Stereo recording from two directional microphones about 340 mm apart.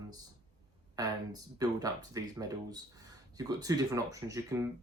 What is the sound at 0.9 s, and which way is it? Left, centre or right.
Speech, centre.